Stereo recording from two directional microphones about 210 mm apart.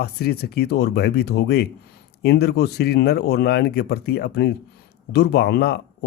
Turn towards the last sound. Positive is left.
turn(degrees=50)  # may be behind; listen again after turning